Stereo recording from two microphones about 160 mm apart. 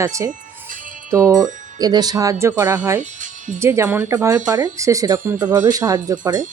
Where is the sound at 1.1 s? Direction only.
20° right (ahead or behind).